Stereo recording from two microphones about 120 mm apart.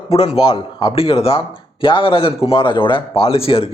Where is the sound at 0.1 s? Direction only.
55° left (ahead or behind).